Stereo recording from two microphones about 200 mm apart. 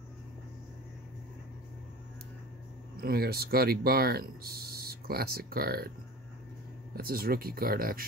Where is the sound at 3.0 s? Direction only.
50° right (ahead or behind).